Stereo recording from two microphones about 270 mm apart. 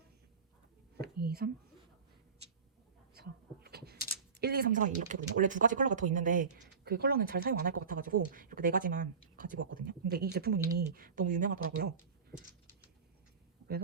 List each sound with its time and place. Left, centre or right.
1.0 s speech: right
3.2 s a sound: right
4.4 s speech: right